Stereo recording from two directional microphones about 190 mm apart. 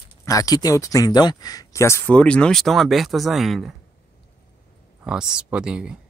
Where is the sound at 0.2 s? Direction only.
15° left (ahead or behind); by 3.7 s centre (ahead or behind).